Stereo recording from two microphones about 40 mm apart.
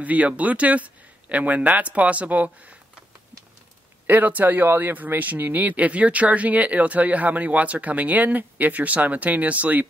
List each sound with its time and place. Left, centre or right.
0.0 s speech: right
4.1 s speech: right
4.6 s speech: right